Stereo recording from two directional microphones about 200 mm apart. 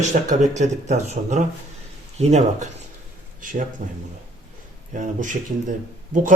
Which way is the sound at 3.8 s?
40° right (ahead or behind).